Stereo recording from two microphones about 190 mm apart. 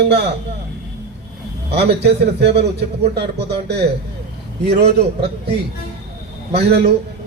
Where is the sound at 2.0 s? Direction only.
60° right (ahead or behind).